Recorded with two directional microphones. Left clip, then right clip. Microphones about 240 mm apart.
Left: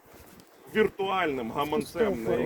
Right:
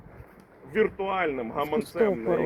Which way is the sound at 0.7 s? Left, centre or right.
Left.